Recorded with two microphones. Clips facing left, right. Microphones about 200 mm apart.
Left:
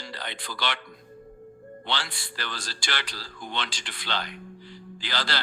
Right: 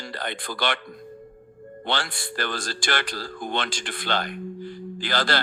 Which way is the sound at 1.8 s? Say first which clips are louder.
Right 5 dB; 50° right (ahead or behind).